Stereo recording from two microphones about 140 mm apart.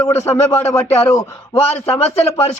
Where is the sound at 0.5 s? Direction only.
20° left (ahead or behind).